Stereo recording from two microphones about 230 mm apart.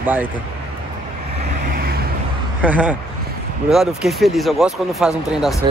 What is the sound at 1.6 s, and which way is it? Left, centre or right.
Vehicle, right.